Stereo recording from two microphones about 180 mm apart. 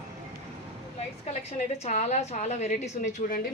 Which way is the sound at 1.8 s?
40° left (ahead or behind).